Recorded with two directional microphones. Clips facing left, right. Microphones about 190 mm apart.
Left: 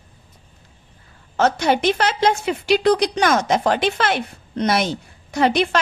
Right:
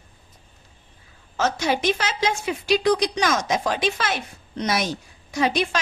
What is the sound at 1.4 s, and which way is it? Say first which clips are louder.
A woman's voice: left 5 dB; 60° left (ahead or behind).